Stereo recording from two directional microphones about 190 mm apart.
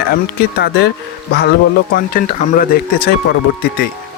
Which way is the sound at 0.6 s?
60° left (ahead or behind).